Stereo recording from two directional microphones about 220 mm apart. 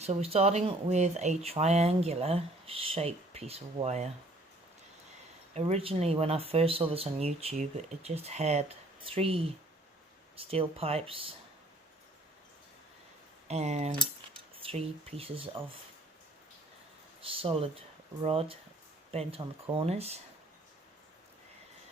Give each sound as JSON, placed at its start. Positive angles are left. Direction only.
{"t": 0.0, "sound": "speech", "side_deg": -30}
{"t": 5.5, "sound": "speech", "side_deg": -30}
{"t": 13.5, "sound": "speech", "side_deg": -30}
{"t": 17.2, "sound": "speech", "side_deg": -25}